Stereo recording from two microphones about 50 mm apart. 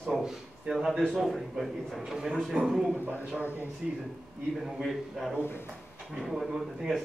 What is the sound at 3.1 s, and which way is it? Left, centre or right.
Speech, right.